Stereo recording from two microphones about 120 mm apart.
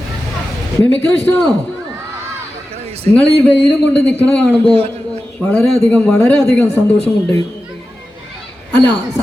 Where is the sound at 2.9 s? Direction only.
55° right (ahead or behind).